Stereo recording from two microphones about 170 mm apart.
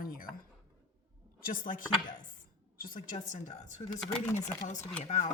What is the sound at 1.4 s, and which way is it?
Speech, 55° left (ahead or behind).